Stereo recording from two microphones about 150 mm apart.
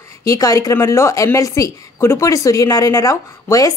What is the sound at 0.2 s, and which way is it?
A woman's voice, 25° left (ahead or behind).